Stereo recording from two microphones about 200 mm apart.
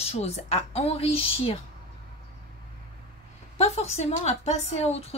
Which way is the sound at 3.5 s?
30° left (ahead or behind).